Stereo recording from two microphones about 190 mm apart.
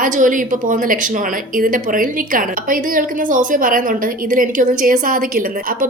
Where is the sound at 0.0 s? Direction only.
45° right (ahead or behind).